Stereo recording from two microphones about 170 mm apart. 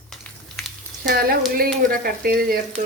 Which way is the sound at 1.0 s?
60° right (ahead or behind).